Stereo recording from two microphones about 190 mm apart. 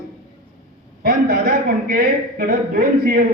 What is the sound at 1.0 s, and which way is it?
A man's voice, 50° right (ahead or behind).